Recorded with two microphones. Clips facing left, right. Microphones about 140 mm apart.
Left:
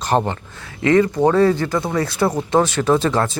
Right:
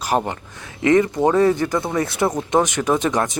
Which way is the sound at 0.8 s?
20° right (ahead or behind).